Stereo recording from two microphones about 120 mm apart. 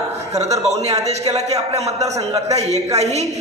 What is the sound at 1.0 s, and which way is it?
Speech, 65° right (ahead or behind).